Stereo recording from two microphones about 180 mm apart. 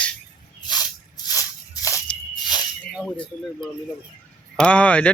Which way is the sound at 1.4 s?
20° left (ahead or behind).